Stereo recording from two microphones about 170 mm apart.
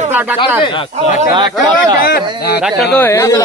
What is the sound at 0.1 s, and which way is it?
Snake, 10° right (ahead or behind).